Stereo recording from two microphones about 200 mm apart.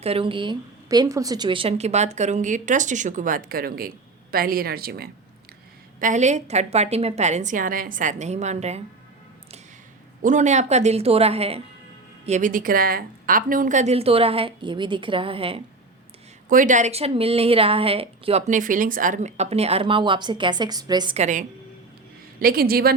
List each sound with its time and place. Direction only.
0.0 s a woman's voice: 30° right (ahead or behind); by 5.0 s 50° right (ahead or behind)
6.0 s a woman's voice: 40° right (ahead or behind)
10.2 s a woman's voice: 35° right (ahead or behind)
16.5 s a woman's voice: 40° right (ahead or behind); by 21.2 s 20° right (ahead or behind)
21.2 s a woman's voice: 40° right (ahead or behind)